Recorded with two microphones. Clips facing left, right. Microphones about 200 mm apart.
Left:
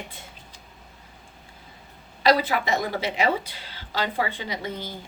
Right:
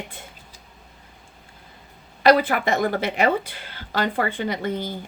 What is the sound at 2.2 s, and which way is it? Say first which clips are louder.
A woman's voice: right 4 dB; 55° right (ahead or behind).